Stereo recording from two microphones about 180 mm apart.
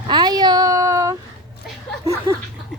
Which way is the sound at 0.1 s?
25° right (ahead or behind).